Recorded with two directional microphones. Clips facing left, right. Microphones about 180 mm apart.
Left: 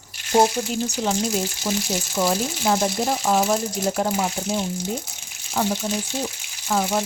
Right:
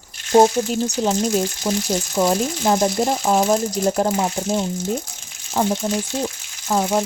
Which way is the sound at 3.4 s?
45° right (ahead or behind).